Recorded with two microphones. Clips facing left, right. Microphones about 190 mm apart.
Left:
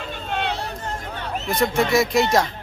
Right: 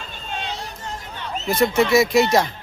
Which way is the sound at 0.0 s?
60° left (ahead or behind).